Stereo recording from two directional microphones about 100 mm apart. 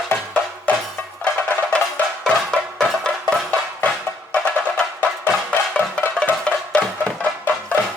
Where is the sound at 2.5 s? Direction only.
5° left (ahead or behind).